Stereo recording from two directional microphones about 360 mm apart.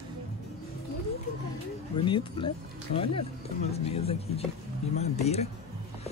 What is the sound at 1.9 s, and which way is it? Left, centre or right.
Speech, centre.